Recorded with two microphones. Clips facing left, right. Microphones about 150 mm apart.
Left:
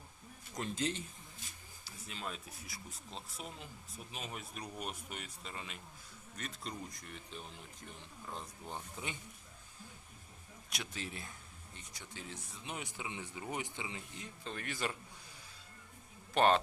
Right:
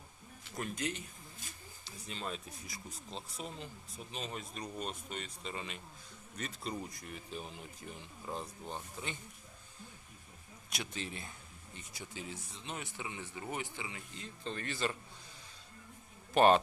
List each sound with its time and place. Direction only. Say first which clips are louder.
0.5 s speech: left 1 dB; 25° left (ahead or behind)
1.8 s speech: right 2 dB; 5° left (ahead or behind)
8.7 s speech: even; 10° left (ahead or behind)
10.7 s speech: right 2 dB; centre (ahead or behind)
12.6 s speech: right 1 dB; 15° left (ahead or behind)
14.4 s speech: right 3 dB; 10° left (ahead or behind)
16.3 s speech: right 3 dB; 10° right (ahead or behind)